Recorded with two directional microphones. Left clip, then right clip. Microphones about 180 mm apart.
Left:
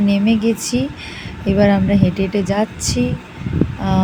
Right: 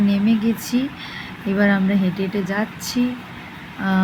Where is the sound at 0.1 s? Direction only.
20° left (ahead or behind).